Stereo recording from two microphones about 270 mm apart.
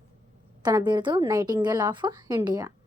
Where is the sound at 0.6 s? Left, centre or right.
Centre.